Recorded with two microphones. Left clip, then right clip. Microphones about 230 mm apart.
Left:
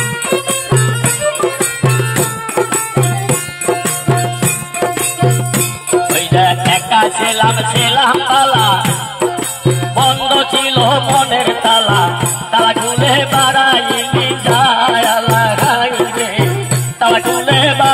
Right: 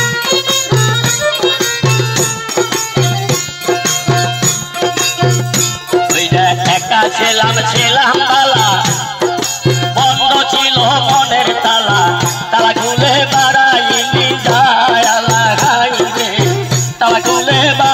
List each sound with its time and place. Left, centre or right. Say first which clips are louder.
2.1 s music: right 1 dB; right
6.1 s music: even; right